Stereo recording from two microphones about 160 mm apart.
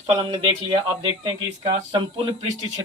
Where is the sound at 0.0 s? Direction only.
30° right (ahead or behind).